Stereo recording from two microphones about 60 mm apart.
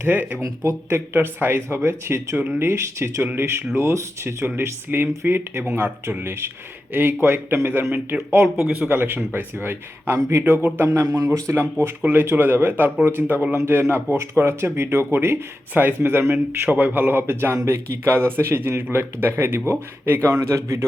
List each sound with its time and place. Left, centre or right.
0.0 s speech: right
0.4 s speech: right
10.2 s speech: right
11.5 s speech: right
15.7 s speech: right
16.0 s speech: right
16.5 s speech: right